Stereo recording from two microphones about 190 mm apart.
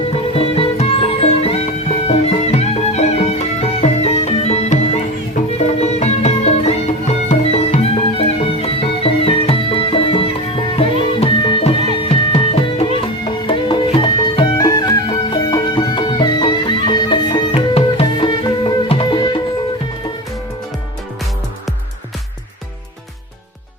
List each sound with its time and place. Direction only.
0.3 s music: 30° left (ahead or behind)